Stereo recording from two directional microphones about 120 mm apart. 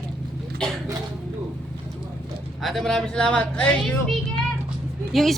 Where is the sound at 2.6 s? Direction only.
Centre (ahead or behind).